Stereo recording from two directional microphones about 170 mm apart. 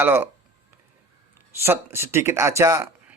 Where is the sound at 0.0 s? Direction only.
10° right (ahead or behind).